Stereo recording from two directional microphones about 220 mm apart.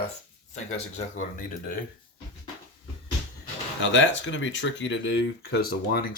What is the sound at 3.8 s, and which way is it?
Speech, 60° left (ahead or behind).